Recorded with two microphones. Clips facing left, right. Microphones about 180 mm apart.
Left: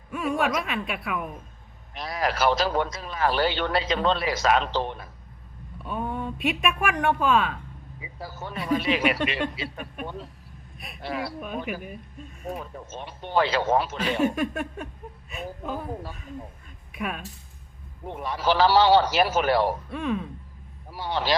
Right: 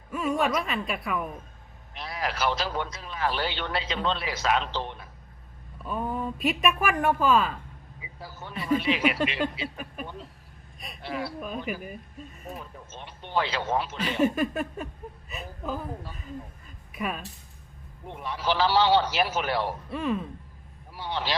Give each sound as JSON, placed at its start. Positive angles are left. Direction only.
{"t": 0.1, "sound": "speech", "side_deg": 0}
{"t": 1.9, "sound": "speech", "side_deg": 45}
{"t": 5.8, "sound": "speech", "side_deg": 0}
{"t": 8.2, "sound": "speech", "side_deg": 40}
{"t": 8.5, "sound": "speech", "side_deg": 65}
{"t": 8.8, "sound": "speech", "side_deg": 40}
{"t": 10.0, "sound": "a sound", "side_deg": 0}
{"t": 12.5, "sound": "speech", "side_deg": 55}
{"t": 14.2, "sound": "a sound", "side_deg": 0}
{"t": 16.9, "sound": "a sound", "side_deg": 0}
{"t": 18.0, "sound": "speech", "side_deg": 45}
{"t": 19.9, "sound": "a sound", "side_deg": 0}
{"t": 20.9, "sound": "speech", "side_deg": 45}